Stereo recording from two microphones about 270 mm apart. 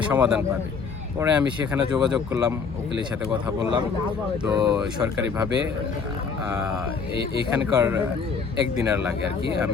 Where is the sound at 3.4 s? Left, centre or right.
Centre.